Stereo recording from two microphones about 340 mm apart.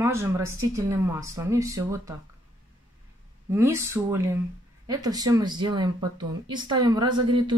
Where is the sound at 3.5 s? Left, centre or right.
Centre.